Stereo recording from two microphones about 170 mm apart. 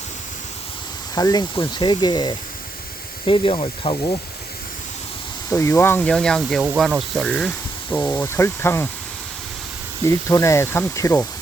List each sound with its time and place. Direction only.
1.1 s speech: 25° left (ahead or behind)
5.5 s speech: 15° left (ahead or behind)
10.1 s speech: 15° left (ahead or behind)